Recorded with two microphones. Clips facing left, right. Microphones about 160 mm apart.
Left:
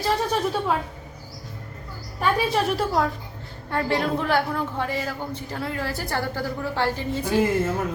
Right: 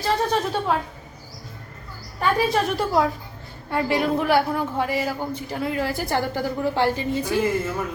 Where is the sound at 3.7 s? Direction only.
10° right (ahead or behind).